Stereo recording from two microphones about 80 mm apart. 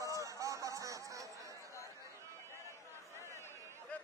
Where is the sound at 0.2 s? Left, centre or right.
Right.